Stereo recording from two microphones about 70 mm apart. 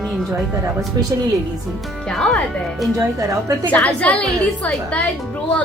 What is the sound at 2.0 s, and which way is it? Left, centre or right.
Speech, centre.